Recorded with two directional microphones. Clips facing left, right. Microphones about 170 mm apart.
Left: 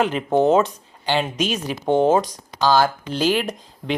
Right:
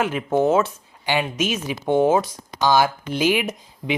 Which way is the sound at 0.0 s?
5° right (ahead or behind).